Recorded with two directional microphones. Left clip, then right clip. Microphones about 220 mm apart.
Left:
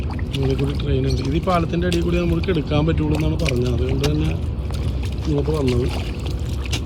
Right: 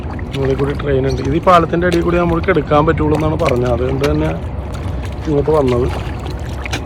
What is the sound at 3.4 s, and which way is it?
Speech, 20° right (ahead or behind).